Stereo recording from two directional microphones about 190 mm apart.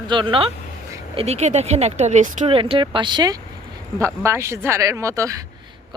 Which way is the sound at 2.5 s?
30° right (ahead or behind).